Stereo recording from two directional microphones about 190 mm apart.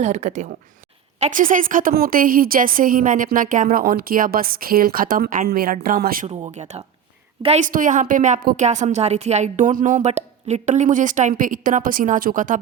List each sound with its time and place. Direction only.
0.0 s a woman's voice: 40° right (ahead or behind)
6.2 s a woman's voice: 35° right (ahead or behind)